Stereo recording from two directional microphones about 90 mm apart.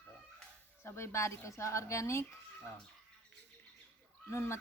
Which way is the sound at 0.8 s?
30° left (ahead or behind).